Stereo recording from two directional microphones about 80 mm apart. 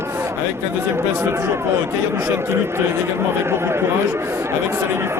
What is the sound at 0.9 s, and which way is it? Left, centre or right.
A man's voice, right.